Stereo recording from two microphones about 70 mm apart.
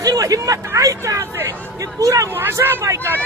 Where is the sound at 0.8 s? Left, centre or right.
Right.